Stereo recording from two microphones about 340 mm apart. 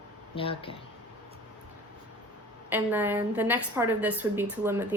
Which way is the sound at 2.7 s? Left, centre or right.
Centre.